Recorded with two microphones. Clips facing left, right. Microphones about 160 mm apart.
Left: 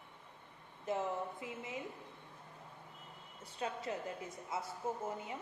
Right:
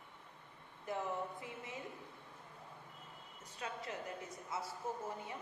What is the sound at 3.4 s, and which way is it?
A woman's voice, 30° left (ahead or behind).